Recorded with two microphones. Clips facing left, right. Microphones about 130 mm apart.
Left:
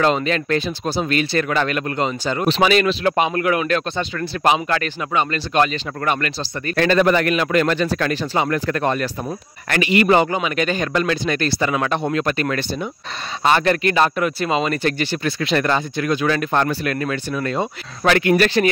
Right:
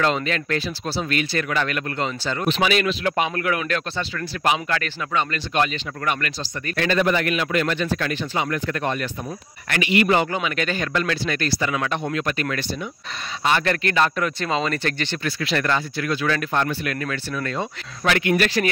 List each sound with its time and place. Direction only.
0.0 s speech: 20° left (ahead or behind)
1.1 s speech: 30° left (ahead or behind)
2.4 s speech: 35° left (ahead or behind)
10.2 s speech: 20° left (ahead or behind); by 13.7 s 40° left (ahead or behind)
13.7 s speech: 20° left (ahead or behind)
15.2 s speech: 25° left (ahead or behind)
16.5 s speech: 40° left (ahead or behind)
17.1 s speech: 20° left (ahead or behind)
18.0 s speech: 40° left (ahead or behind)